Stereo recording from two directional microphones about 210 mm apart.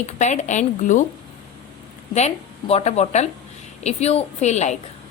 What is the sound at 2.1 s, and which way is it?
A woman's voice, 30° left (ahead or behind).